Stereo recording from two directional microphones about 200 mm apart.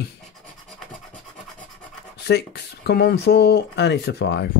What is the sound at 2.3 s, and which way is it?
Speech, 55° left (ahead or behind).